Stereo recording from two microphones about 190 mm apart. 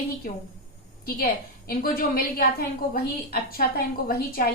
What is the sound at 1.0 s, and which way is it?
A woman's voice, 50° left (ahead or behind).